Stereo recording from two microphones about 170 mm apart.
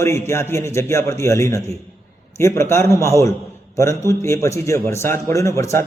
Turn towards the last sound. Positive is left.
turn(degrees=20)  # may be behind; listen again after turning